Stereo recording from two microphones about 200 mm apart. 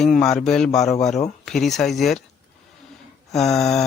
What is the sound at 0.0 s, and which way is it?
Mantra, centre (ahead or behind).